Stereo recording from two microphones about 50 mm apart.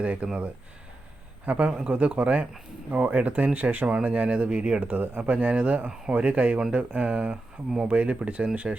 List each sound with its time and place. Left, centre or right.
0.0 s speech: right
1.5 s speech: right
3.8 s speech: right